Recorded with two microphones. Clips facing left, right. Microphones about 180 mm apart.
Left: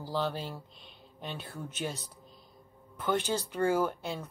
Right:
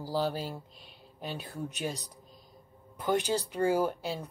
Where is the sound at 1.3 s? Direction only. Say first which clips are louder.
Right 4 dB; 40° right (ahead or behind).